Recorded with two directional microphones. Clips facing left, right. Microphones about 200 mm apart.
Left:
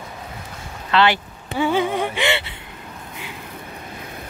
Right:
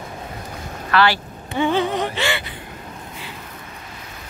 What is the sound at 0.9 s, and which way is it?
Speech, 20° left (ahead or behind).